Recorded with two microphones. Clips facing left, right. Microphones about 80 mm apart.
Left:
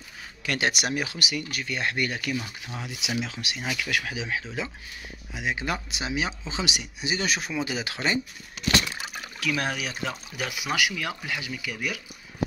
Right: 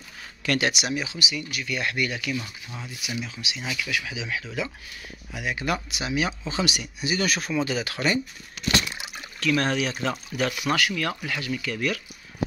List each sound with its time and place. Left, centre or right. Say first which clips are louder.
0.4 s speech: right 5 dB; centre
0.7 s speech: even; left
2.6 s speech: left 2 dB; left
3.4 s speech: even; left
4.3 s speech: right 1 dB; left
9.4 s speech: right 5 dB; centre